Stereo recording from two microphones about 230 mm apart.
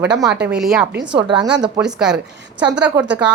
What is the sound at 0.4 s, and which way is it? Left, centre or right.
Speech, centre.